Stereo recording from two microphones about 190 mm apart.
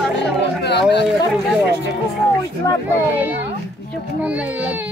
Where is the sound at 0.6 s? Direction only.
60° left (ahead or behind).